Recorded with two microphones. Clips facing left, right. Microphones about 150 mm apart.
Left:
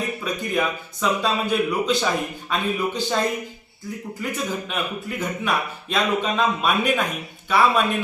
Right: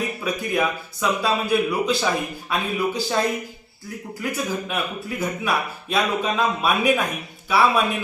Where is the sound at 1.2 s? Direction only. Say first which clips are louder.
Right 3 dB; 5° right (ahead or behind).